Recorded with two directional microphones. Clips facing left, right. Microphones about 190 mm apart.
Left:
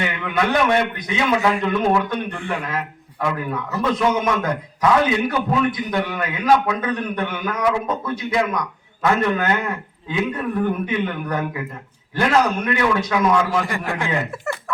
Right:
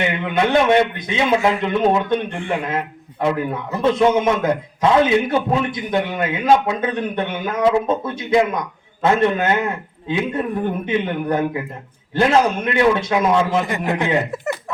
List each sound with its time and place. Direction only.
0.0 s a man's voice: 25° right (ahead or behind)